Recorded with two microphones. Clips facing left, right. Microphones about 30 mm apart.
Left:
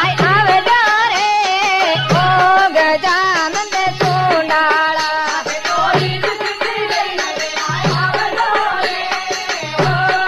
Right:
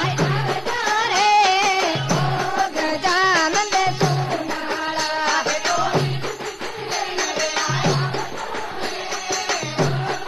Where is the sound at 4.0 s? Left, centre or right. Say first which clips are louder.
Left 7 dB; left.